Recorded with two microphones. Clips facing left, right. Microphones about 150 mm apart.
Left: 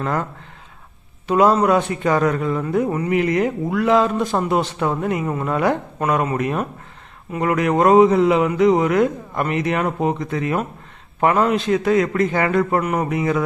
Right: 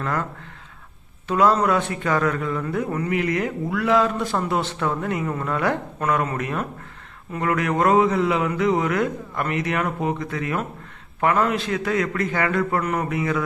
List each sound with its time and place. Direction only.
0.0 s speech: 25° left (ahead or behind)
1.3 s speech: 15° left (ahead or behind)